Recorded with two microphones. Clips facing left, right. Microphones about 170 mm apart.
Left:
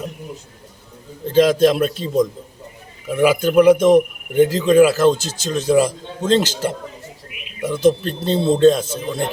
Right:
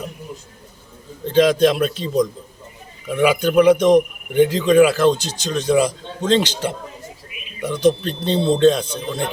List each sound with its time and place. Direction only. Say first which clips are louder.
1.3 s speech: left 1 dB; 5° left (ahead or behind)
3.1 s speech: left 1 dB; 5° left (ahead or behind)
7.3 s a sound: even; 70° left (ahead or behind)
7.7 s speech: left 1 dB; 5° left (ahead or behind)